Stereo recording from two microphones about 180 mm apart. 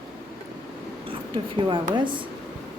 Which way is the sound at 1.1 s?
30° right (ahead or behind).